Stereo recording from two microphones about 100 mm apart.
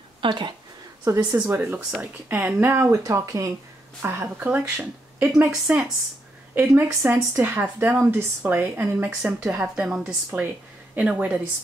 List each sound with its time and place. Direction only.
0.2 s speech: 50° right (ahead or behind)
1.0 s speech: 30° right (ahead or behind)
1.4 s a woman's voice: 20° right (ahead or behind)
2.9 s speech: 30° right (ahead or behind)
4.5 s a woman's voice: 15° right (ahead or behind)
6.7 s a woman's voice: 25° right (ahead or behind)
8.1 s a woman's voice: 25° right (ahead or behind)